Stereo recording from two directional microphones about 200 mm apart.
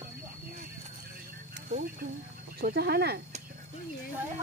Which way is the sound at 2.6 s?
50° right (ahead or behind).